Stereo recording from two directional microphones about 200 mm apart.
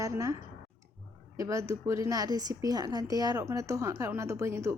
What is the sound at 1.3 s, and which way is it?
Speech, 15° right (ahead or behind).